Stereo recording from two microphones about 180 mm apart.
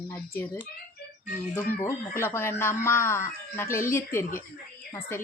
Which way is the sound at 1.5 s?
15° left (ahead or behind).